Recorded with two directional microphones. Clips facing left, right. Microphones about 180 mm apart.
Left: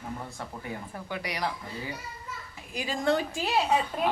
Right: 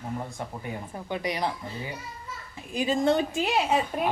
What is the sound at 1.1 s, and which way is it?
Speech, 25° right (ahead or behind).